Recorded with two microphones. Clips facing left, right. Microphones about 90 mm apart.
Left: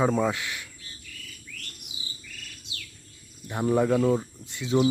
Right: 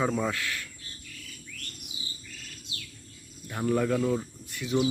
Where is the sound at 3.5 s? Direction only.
20° left (ahead or behind).